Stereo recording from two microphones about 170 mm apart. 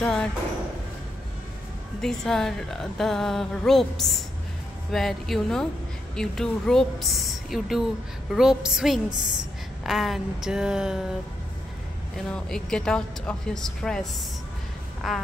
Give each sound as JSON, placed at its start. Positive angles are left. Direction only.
{"t": 0.0, "sound": "a woman's voice", "side_deg": 5}
{"t": 2.0, "sound": "a woman's voice", "side_deg": 5}
{"t": 12.3, "sound": "a woman's voice", "side_deg": 5}
{"t": 15.0, "sound": "a woman's voice", "side_deg": 0}